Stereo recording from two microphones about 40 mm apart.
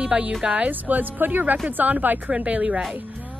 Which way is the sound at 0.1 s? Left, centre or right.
Right.